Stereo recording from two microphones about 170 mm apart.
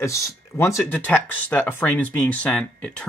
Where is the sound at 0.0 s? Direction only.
20° left (ahead or behind).